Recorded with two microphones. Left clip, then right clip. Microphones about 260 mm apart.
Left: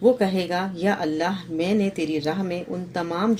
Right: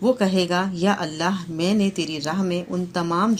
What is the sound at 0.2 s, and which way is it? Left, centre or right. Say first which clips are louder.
Speech: right 2 dB; right.